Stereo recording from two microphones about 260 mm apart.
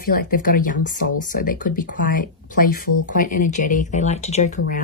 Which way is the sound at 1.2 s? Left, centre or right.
Left.